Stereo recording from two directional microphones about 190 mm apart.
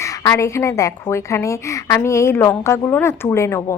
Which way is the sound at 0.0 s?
20° left (ahead or behind).